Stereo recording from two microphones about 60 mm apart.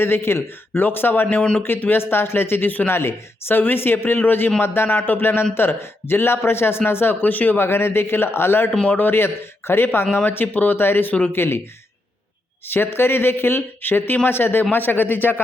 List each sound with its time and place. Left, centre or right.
0.0 s speech: left
8.8 s a man's voice: left
9.0 s speech: left
12.6 s speech: left